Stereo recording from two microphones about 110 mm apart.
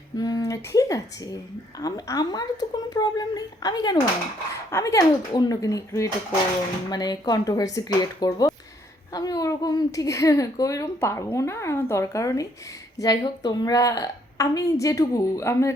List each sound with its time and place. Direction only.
0.2 s a woman's voice: 35° left (ahead or behind)
4.7 s a woman's voice: 30° left (ahead or behind)